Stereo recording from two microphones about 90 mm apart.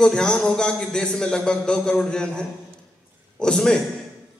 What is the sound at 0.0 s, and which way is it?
A man's voice, 10° left (ahead or behind).